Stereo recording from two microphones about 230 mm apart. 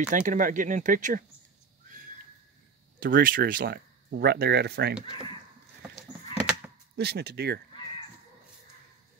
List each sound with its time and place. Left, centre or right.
0.1 s speech: right
3.0 s speech: right
5.8 s sheep: centre
7.0 s speech: right